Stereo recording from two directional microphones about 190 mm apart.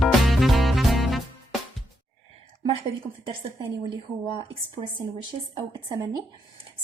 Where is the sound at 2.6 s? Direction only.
25° right (ahead or behind).